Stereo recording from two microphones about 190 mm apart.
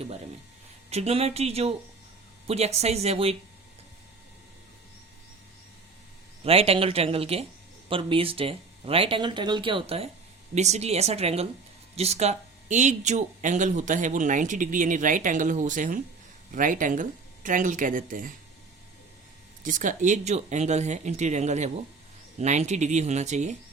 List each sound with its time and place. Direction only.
0.9 s speech: 35° right (ahead or behind)
6.4 s speech: 30° right (ahead or behind)
19.6 s speech: 40° right (ahead or behind)